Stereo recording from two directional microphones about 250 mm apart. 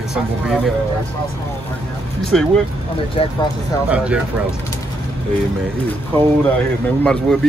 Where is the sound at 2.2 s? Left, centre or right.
Centre.